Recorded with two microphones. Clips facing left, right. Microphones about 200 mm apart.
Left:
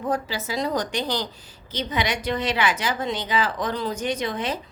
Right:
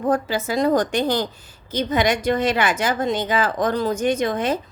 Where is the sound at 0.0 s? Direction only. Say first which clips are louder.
Right 6 dB; 50° right (ahead or behind).